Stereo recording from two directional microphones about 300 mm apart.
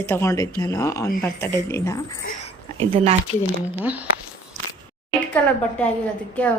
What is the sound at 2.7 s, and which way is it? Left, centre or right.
Speech, centre.